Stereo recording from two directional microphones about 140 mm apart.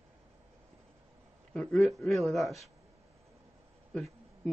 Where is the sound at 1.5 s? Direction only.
5° left (ahead or behind).